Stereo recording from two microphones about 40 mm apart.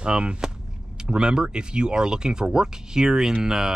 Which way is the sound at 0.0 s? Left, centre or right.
Right.